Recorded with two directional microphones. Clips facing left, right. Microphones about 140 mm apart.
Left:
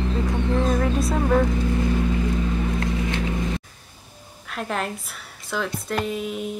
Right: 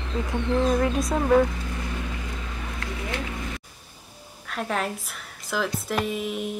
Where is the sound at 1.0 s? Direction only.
5° right (ahead or behind).